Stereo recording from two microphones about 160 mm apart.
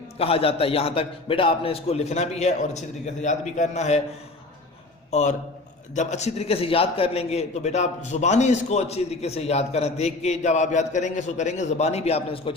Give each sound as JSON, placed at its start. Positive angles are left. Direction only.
{"t": 0.2, "sound": "a man's voice", "side_deg": 35}
{"t": 5.9, "sound": "a man's voice", "side_deg": 45}